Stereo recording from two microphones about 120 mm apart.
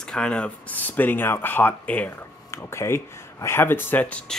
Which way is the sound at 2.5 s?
25° left (ahead or behind).